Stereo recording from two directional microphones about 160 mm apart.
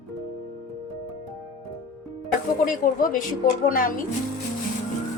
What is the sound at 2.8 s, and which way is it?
A woman's voice, 55° left (ahead or behind).